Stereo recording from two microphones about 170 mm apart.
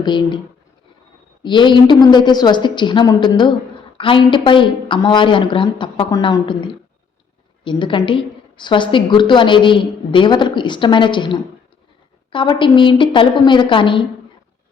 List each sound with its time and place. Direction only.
0.0 s a woman's voice: 30° left (ahead or behind)
1.5 s a woman's voice: 30° left (ahead or behind)